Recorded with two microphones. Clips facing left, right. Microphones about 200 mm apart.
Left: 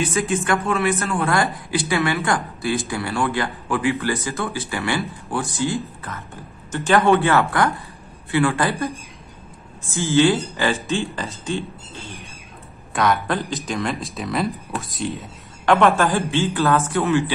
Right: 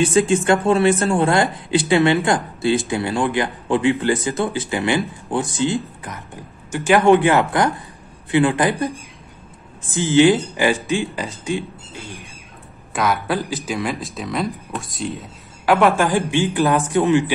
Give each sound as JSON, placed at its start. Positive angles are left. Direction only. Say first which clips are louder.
{"t": 0.0, "sound": "speech", "louder": "right 6 dB", "side_deg": -30}
{"t": 12.9, "sound": "a man's voice", "louder": "even", "side_deg": 0}